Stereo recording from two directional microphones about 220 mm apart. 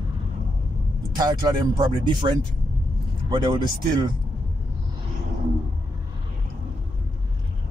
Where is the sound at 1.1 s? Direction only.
20° right (ahead or behind).